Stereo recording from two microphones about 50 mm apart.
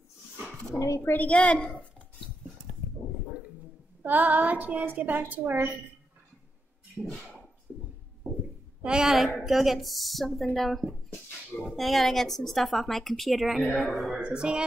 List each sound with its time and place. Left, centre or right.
0.7 s speech: left
1.1 s a woman's voice: left
4.0 s a woman's voice: right
8.8 s a woman's voice: centre
9.1 s speech: centre
14.1 s speech: centre